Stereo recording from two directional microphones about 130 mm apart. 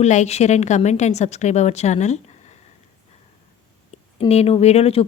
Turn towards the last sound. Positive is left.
turn(degrees=50)  # may be behind; listen again after turning